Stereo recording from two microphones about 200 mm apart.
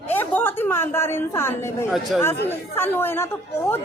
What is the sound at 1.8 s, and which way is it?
Speech, centre (ahead or behind).